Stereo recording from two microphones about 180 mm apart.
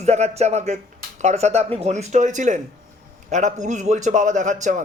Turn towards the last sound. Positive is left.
turn(degrees=-45)  # may be behind; listen again after turning